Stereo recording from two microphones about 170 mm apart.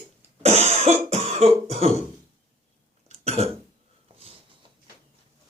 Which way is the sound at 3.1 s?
40° right (ahead or behind).